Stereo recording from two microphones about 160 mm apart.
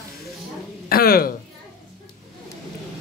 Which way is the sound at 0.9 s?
65° left (ahead or behind).